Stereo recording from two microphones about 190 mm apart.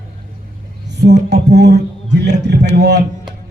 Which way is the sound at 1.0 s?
65° right (ahead or behind).